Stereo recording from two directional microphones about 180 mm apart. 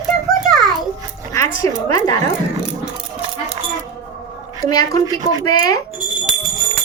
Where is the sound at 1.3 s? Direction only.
15° left (ahead or behind).